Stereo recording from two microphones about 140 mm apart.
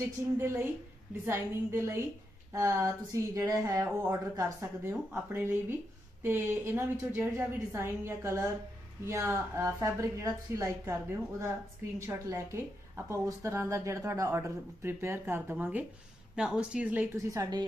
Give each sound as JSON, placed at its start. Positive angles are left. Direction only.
{"t": 1.2, "sound": "a woman's voice", "side_deg": -20}